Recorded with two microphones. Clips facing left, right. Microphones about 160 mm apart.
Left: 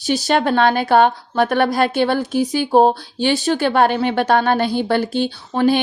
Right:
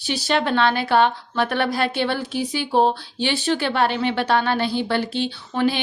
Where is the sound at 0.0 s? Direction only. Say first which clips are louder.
Left 5 dB; 45° left (ahead or behind).